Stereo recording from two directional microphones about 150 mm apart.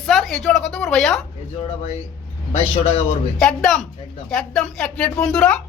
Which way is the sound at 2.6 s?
40° left (ahead or behind).